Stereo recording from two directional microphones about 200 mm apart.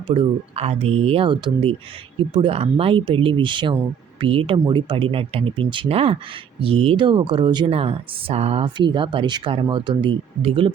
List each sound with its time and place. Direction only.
0.1 s speech: 30° right (ahead or behind)